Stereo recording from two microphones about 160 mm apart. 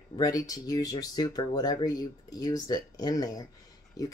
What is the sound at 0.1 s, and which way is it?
Speech, 20° left (ahead or behind).